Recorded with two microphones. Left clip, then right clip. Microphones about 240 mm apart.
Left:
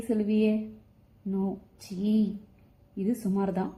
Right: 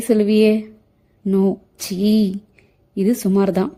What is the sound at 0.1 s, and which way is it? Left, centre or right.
A woman's voice, right.